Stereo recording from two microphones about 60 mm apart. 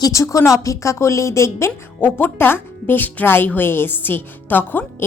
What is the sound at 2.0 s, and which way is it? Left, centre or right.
Speech, left.